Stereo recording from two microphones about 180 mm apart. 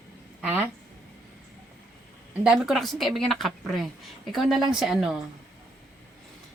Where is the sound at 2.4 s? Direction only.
Centre (ahead or behind).